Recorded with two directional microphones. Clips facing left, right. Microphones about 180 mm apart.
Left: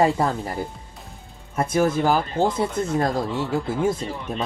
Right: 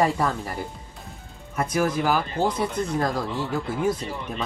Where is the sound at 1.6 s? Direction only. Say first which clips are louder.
Left 3 dB; 30° left (ahead or behind).